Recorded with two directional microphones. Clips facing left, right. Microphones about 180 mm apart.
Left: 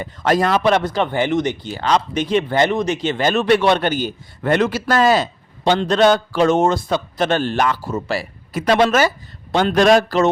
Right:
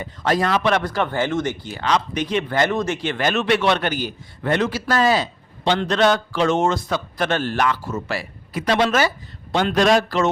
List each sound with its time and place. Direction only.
0.3 s speech: 45° left (ahead or behind)
0.7 s speech: 20° left (ahead or behind)
1.7 s speech: 35° left (ahead or behind)
4.4 s a man's voice: 50° left (ahead or behind)
5.7 s a man's voice: 30° left (ahead or behind)
8.6 s speech: 45° left (ahead or behind)